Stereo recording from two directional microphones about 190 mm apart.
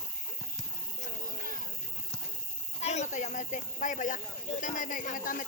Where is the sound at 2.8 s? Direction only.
35° left (ahead or behind).